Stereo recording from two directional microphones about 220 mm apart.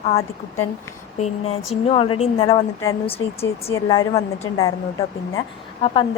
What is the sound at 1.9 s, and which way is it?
Speech, 25° left (ahead or behind).